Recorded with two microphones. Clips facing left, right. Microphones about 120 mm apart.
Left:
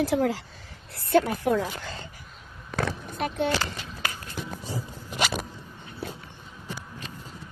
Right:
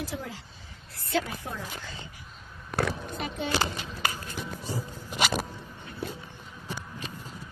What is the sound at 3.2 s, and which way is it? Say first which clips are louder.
Speech: left 10 dB; 55° left (ahead or behind).